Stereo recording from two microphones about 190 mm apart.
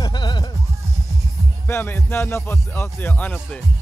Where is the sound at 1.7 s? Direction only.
10° left (ahead or behind).